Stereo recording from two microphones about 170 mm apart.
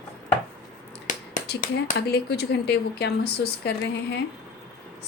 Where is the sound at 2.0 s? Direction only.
70° left (ahead or behind).